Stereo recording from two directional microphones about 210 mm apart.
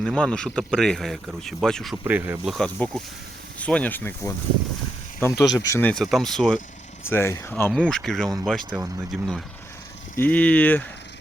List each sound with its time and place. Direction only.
0.0 s speech: 5° left (ahead or behind)
7.1 s speech: 10° left (ahead or behind)
10.2 s speech: 5° left (ahead or behind)